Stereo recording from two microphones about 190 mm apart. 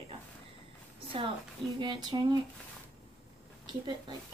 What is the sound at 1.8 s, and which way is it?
Speech, 25° right (ahead or behind).